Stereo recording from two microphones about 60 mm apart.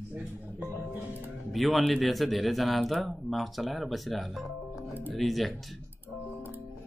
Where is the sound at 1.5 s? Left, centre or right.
Centre.